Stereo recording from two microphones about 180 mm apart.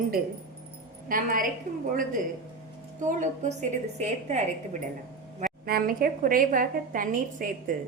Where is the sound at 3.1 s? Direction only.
45° right (ahead or behind).